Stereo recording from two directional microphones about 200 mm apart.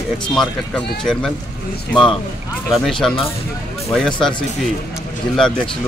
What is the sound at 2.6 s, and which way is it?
Speech, centre (ahead or behind).